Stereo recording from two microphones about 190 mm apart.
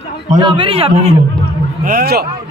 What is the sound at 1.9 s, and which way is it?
Speech, 55° right (ahead or behind).